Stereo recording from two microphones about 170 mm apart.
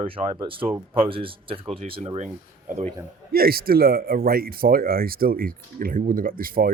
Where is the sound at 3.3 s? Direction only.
65° right (ahead or behind).